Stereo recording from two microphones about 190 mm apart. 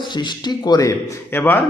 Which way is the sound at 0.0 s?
25° left (ahead or behind).